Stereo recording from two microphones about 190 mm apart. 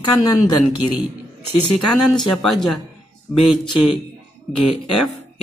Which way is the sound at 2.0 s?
Centre (ahead or behind).